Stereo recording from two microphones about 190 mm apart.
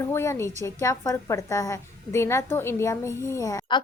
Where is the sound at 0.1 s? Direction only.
15° left (ahead or behind).